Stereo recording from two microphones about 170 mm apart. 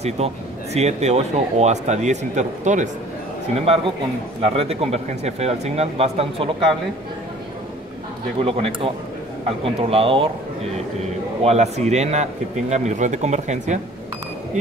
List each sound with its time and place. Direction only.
0.2 s speech: 40° right (ahead or behind)
8.4 s speech: 35° right (ahead or behind)
11.4 s speech: 40° right (ahead or behind)